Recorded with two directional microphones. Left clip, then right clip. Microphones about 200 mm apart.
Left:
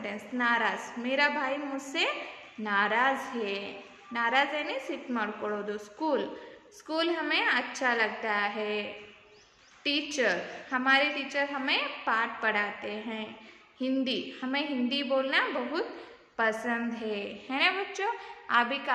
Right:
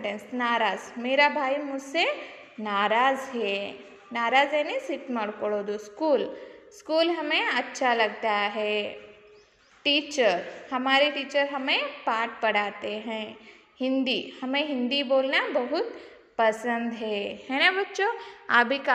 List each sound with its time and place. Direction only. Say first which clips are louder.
0.0 s a woman's voice: right 2 dB; 20° right (ahead or behind)